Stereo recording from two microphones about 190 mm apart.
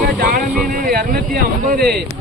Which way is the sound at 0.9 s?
50° right (ahead or behind).